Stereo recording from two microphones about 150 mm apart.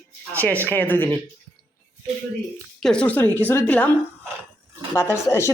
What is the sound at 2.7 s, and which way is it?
A woman's voice, 5° left (ahead or behind).